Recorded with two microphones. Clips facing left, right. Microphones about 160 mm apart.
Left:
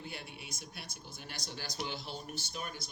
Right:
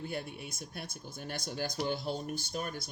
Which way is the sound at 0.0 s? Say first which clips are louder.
Right 7 dB; 50° right (ahead or behind).